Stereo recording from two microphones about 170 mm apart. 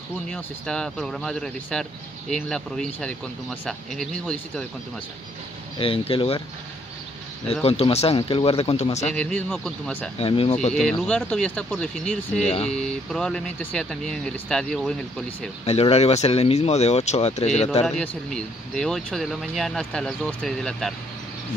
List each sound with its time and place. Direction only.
0.3 s speech: 5° left (ahead or behind)
5.8 s speech: 30° left (ahead or behind)
7.6 s speech: 35° left (ahead or behind)
9.1 s a man's voice: 5° left (ahead or behind)
10.1 s speech: 35° left (ahead or behind)
10.7 s speech: 5° left (ahead or behind)
12.4 s speech: 40° left (ahead or behind)
12.6 s speech: 5° left (ahead or behind)
15.6 s speech: 35° left (ahead or behind)
17.8 s speech: 5° left (ahead or behind)